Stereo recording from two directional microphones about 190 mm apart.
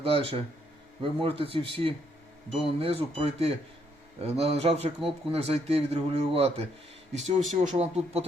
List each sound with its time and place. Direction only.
0.0 s speech: 30° right (ahead or behind)